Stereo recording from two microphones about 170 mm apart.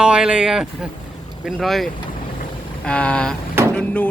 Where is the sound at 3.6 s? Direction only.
15° right (ahead or behind).